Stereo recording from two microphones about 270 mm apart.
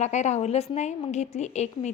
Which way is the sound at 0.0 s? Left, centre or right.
Left.